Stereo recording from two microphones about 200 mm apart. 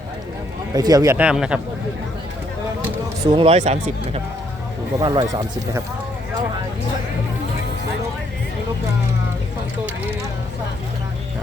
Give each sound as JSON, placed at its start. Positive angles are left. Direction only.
{"t": 0.7, "sound": "a man's voice", "side_deg": -20}
{"t": 3.3, "sound": "speech", "side_deg": -30}
{"t": 4.9, "sound": "speech", "side_deg": -20}